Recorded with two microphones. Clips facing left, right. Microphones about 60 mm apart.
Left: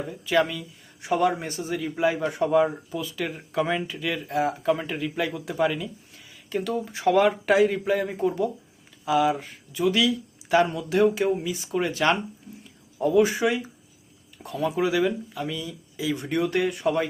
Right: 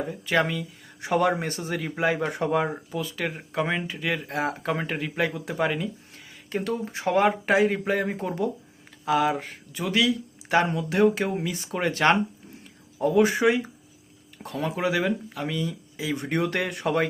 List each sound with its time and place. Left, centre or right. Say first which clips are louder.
0.1 s speech: left 2 dB; right
11.3 s speech: left 2 dB; right
14.8 s speech: left 1 dB; right